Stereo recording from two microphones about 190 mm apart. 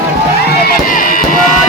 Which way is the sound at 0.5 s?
50° left (ahead or behind).